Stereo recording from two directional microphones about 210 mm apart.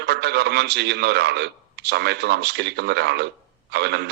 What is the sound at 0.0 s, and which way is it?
A man's voice, 50° right (ahead or behind).